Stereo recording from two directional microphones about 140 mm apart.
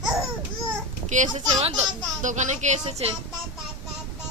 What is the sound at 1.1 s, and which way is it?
Speech, 60° right (ahead or behind).